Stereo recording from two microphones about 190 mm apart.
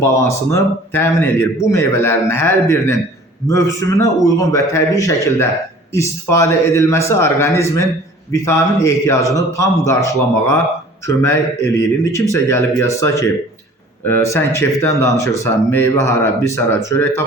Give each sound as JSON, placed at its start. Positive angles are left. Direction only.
{"t": 0.0, "sound": "speech", "side_deg": 15}